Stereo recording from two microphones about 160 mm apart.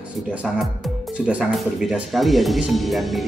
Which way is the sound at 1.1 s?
5° right (ahead or behind).